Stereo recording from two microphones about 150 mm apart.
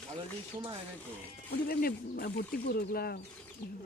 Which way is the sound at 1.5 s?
80° left.